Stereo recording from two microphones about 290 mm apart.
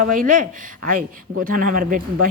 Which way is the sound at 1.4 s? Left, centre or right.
Right.